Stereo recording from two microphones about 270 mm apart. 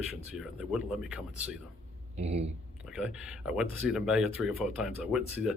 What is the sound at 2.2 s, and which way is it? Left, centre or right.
Speech, right.